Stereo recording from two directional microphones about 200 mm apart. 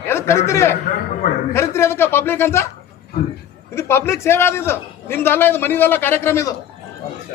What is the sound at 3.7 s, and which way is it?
A man's voice, 15° left (ahead or behind).